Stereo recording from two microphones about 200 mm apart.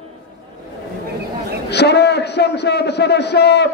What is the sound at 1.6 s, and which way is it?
A man's voice, 55° left (ahead or behind).